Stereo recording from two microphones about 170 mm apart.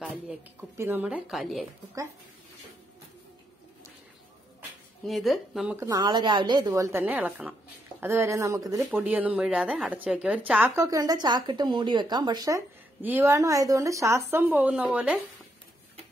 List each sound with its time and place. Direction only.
0.6 s a woman's voice: 10° right (ahead or behind)
5.0 s speech: centre (ahead or behind)
5.8 s a woman's voice: 20° right (ahead or behind)
9.0 s a woman's voice: 10° right (ahead or behind)